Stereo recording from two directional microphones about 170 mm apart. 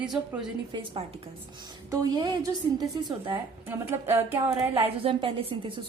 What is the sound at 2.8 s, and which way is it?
Speech, 25° right (ahead or behind).